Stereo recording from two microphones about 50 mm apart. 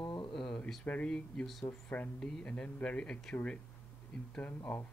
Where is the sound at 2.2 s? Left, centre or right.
Centre.